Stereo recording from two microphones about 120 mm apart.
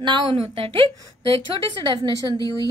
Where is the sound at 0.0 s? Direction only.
45° right (ahead or behind).